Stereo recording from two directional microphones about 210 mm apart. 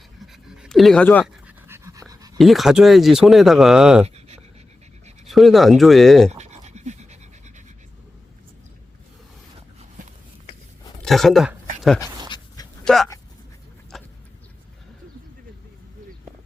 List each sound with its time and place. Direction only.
0.2 s pant: centre (ahead or behind)
1.5 s dog: 10° right (ahead or behind)
2.4 s speech: centre (ahead or behind)
4.0 s writing: 30° right (ahead or behind)
5.3 s speech: centre (ahead or behind)
6.3 s pant: 30° right (ahead or behind)
11.0 s speech: centre (ahead or behind)
12.8 s speech: centre (ahead or behind)
13.9 s a sound: centre (ahead or behind)